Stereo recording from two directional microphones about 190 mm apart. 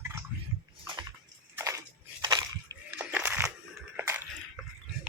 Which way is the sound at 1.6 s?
15° right (ahead or behind).